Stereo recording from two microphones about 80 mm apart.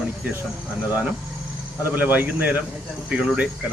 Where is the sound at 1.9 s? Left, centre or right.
Right.